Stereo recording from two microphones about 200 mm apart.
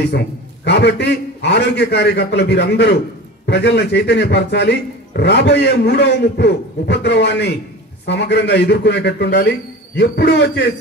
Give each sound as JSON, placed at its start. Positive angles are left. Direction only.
{"t": 0.7, "sound": "a man's voice", "side_deg": 60}